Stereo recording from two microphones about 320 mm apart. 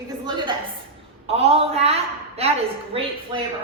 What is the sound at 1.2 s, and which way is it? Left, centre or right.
A woman's voice, centre.